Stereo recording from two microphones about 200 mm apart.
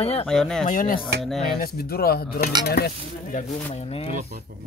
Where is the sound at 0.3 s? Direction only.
5° left (ahead or behind).